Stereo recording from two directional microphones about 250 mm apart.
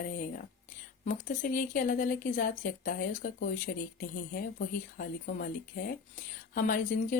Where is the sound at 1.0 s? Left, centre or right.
Left.